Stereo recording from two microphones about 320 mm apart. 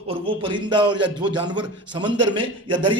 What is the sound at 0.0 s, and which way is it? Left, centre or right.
A man's voice, centre.